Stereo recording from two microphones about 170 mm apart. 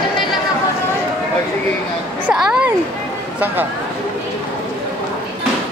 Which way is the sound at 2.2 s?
5° right (ahead or behind).